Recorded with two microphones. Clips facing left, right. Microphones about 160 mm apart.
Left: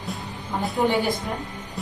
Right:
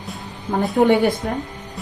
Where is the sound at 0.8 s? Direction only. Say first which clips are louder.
Right 7 dB; 70° right (ahead or behind).